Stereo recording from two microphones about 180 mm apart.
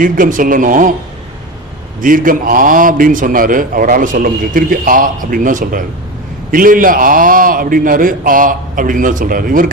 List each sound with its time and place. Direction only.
0.0 s a man's voice: 50° right (ahead or behind)
2.0 s a man's voice: 50° right (ahead or behind)